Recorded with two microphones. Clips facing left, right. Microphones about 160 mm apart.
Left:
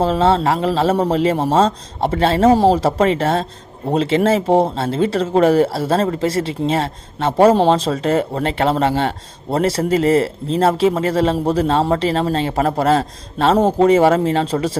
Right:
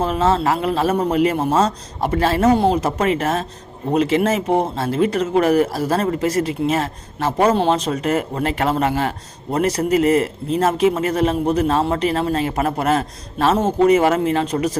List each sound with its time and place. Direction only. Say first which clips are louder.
0.0 s speech: left 3 dB; 30° left (ahead or behind)